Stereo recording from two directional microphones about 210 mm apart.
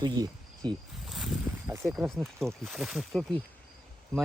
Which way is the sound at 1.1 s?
5° right (ahead or behind).